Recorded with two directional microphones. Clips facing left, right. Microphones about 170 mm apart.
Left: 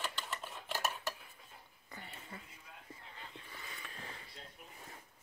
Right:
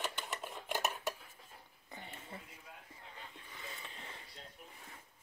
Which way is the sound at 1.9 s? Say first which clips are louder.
Right 1 dB; 20° right (ahead or behind).